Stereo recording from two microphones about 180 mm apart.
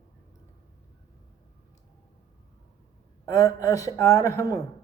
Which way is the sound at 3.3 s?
20° left (ahead or behind).